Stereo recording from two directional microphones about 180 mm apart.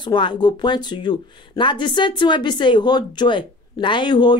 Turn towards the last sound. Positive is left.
turn(degrees=25)  # may be behind; listen again after turning